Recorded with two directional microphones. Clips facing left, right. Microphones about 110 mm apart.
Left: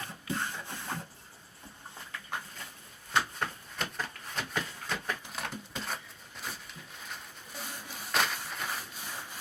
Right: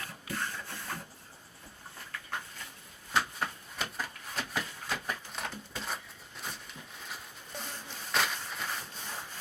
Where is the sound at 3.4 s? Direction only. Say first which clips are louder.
Left 1 dB; 5° right (ahead or behind).